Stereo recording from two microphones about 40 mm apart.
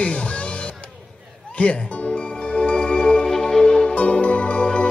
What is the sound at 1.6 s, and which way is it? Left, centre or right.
Speech, left.